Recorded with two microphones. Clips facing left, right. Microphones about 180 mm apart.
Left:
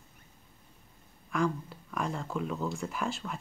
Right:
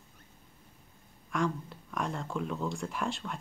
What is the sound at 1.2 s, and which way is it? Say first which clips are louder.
Speech: left 1 dB; centre (ahead or behind).